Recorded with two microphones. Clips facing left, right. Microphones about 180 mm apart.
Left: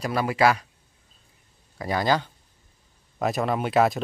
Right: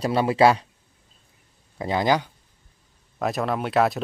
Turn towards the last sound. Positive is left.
turn(degrees=0)  # may be behind; listen again after turning